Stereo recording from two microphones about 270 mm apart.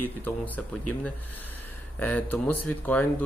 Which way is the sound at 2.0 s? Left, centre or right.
Centre.